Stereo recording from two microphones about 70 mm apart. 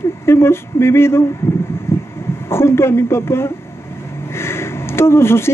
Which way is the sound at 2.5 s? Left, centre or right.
Left.